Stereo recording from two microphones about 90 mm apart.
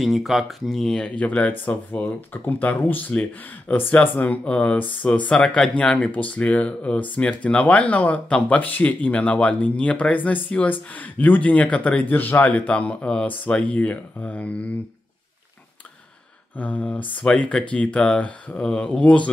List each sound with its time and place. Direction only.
0.0 s speech: centre (ahead or behind); by 14.8 s 15° left (ahead or behind)
16.5 s speech: 15° left (ahead or behind)